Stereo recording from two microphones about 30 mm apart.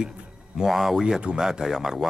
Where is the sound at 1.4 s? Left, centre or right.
Right.